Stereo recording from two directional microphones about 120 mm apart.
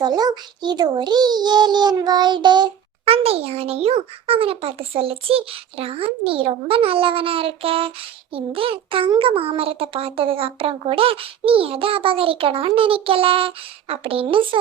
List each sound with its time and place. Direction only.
0.0 s a child's voice: 35° right (ahead or behind)
3.1 s a child's voice: 55° right (ahead or behind)